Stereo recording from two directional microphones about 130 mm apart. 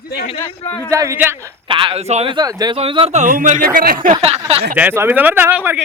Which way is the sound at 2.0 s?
55° right (ahead or behind).